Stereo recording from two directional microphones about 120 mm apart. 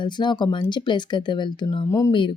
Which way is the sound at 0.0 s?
40° left (ahead or behind).